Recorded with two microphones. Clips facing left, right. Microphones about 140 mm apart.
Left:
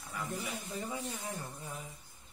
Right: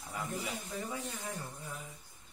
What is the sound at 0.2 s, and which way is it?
Speech, 20° right (ahead or behind).